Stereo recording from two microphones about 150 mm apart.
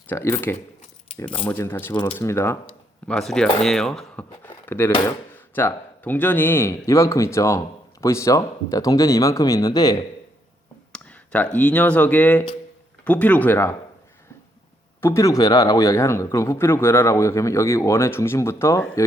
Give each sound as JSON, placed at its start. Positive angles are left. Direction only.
{"t": 0.1, "sound": "speech", "side_deg": 15}
{"t": 3.1, "sound": "speech", "side_deg": 5}
{"t": 10.9, "sound": "speech", "side_deg": 10}
{"t": 15.0, "sound": "speech", "side_deg": 20}